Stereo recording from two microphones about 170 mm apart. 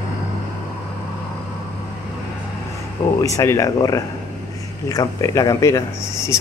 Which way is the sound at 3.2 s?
20° left (ahead or behind).